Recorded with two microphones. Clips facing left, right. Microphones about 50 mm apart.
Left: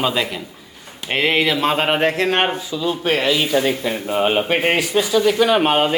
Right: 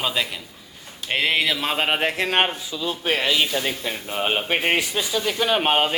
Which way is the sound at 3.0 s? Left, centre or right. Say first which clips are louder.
Left 3 dB; left.